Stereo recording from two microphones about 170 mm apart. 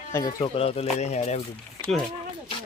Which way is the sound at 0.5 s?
35° left (ahead or behind).